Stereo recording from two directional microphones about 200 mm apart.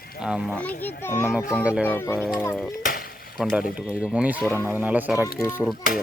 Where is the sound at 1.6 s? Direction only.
5° right (ahead or behind).